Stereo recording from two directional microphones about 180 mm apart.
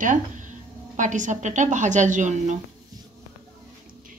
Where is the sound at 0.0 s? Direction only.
45° right (ahead or behind).